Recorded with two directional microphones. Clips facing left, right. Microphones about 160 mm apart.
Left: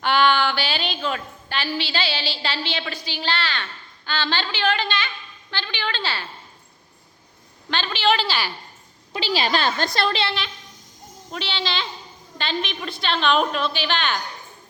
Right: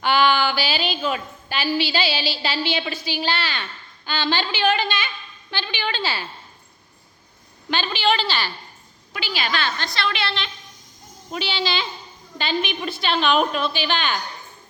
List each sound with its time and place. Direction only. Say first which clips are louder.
0.0 s a woman's voice: even; 5° right (ahead or behind)
7.7 s a woman's voice: even; 5° right (ahead or behind)
9.1 s a woman's voice: left 4 dB; 30° left (ahead or behind)
11.3 s a child's voice: right 3 dB; 5° right (ahead or behind)